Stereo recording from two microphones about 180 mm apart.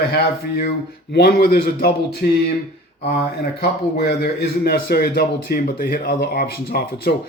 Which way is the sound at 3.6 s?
65° left (ahead or behind).